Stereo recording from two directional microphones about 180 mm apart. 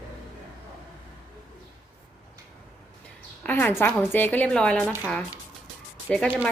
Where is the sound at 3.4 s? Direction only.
10° left (ahead or behind).